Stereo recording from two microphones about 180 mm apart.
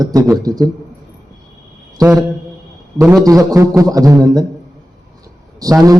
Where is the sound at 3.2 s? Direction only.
20° right (ahead or behind).